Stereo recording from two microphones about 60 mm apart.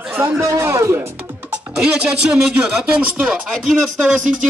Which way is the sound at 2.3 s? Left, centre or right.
Centre.